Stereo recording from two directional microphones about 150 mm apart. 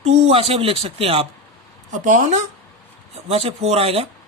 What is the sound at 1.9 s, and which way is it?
Speech, 55° right (ahead or behind).